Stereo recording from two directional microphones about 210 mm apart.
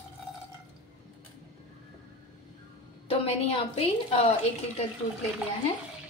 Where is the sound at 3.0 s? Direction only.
30° left (ahead or behind).